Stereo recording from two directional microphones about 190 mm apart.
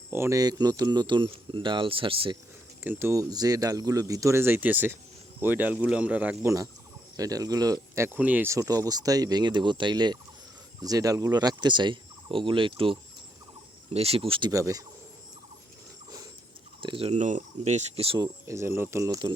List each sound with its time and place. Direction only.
0.1 s speech: 15° right (ahead or behind)
2.8 s speech: 10° right (ahead or behind); by 14.5 s 25° right (ahead or behind)
14.5 s speech: 15° right (ahead or behind)
16.8 s speech: 30° right (ahead or behind)
18.4 s speech: 15° right (ahead or behind)